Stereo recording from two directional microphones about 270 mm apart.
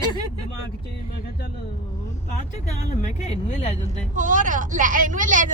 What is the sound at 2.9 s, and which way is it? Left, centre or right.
Speech, left.